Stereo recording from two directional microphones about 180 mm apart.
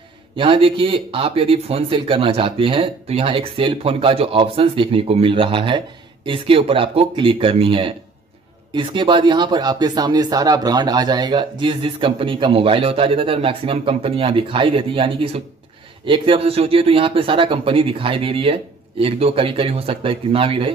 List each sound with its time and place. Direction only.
0.4 s speech: 30° right (ahead or behind)